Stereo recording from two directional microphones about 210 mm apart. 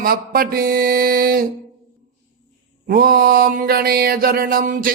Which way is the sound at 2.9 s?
45° right (ahead or behind).